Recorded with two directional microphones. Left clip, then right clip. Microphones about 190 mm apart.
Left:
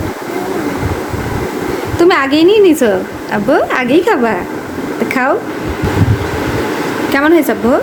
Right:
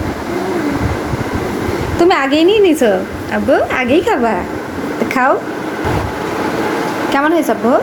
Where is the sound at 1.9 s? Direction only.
10° left (ahead or behind).